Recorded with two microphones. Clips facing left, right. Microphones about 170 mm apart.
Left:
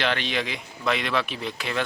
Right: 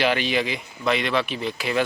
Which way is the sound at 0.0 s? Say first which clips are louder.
Right 4 dB; 5° right (ahead or behind).